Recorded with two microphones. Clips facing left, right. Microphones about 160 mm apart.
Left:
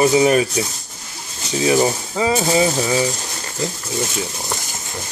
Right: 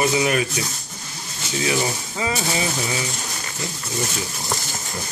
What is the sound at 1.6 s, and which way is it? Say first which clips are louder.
Speech: left 8 dB; 30° left (ahead or behind).